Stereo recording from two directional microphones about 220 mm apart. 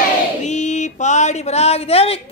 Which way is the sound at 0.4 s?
30° left (ahead or behind).